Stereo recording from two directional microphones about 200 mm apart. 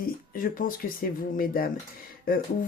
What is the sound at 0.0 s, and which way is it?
Speech, 45° left (ahead or behind).